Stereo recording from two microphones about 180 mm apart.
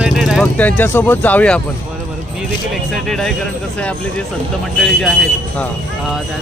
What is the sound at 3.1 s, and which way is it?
Speech, centre (ahead or behind).